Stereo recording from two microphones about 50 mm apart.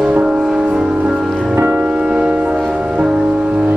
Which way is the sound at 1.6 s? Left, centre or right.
Right.